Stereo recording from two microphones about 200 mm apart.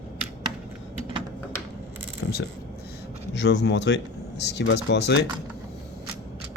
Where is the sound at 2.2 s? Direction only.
60° left (ahead or behind).